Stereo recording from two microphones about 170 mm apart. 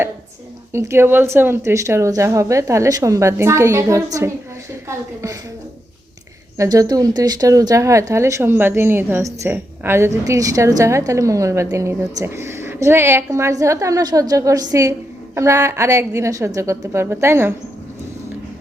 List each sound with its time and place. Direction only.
0.7 s a woman's voice: 15° right (ahead or behind)
6.6 s a woman's voice: 20° right (ahead or behind)